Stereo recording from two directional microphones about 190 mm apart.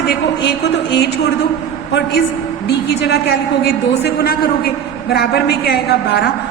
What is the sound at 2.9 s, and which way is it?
A woman's voice, 60° left (ahead or behind).